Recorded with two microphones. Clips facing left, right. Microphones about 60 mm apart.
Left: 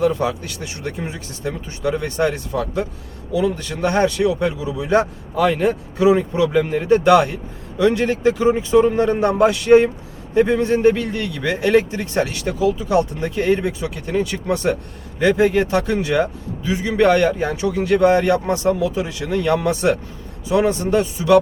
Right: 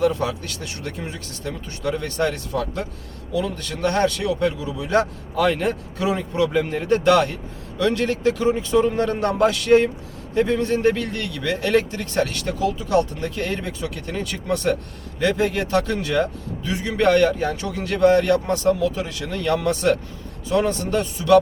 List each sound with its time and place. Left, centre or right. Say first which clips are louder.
0.0 s speech: left 2 dB; centre